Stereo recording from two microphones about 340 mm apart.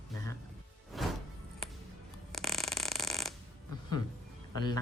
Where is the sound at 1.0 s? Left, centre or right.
Centre.